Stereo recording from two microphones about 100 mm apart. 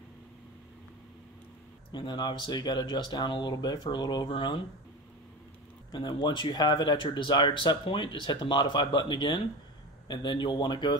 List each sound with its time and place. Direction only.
1.9 s speech: 50° left (ahead or behind)
5.9 s speech: 50° left (ahead or behind)